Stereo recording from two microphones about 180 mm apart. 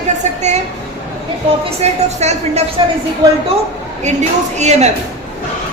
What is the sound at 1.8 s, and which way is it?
A woman's voice, 40° right (ahead or behind).